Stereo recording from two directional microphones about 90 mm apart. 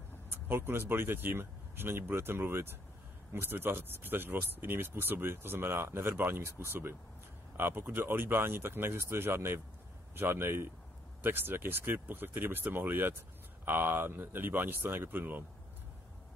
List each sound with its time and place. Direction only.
0.3 s speech: 25° right (ahead or behind)